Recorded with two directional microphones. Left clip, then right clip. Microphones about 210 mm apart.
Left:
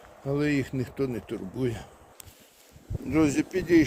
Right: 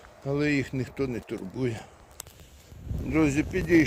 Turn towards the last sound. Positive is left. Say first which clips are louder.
# even
turn(degrees=15)  # may be behind; listen again after turning